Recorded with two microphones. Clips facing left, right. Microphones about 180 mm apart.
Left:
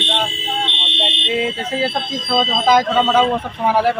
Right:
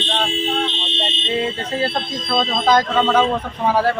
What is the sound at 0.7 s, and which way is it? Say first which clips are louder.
Fire alarm: right 2 dB; 65° left (ahead or behind).